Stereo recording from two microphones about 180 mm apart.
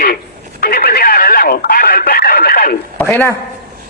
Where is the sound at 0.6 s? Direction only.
55° left (ahead or behind).